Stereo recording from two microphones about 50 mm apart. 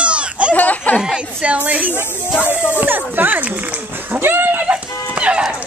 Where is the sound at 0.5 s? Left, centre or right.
Left.